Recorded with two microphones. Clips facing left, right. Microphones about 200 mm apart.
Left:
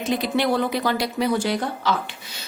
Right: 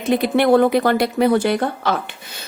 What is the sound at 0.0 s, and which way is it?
A woman's voice, 55° right (ahead or behind).